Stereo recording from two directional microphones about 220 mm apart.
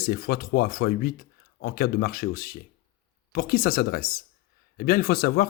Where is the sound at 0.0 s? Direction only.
45° left (ahead or behind).